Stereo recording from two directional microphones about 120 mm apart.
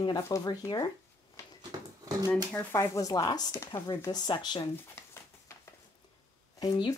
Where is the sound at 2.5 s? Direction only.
25° left (ahead or behind); by 4.6 s 40° left (ahead or behind).